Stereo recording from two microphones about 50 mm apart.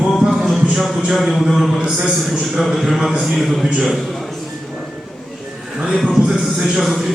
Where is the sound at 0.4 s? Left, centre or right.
Centre.